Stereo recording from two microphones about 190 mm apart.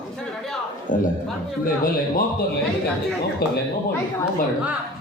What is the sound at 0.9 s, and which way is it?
A man's voice, 45° left (ahead or behind).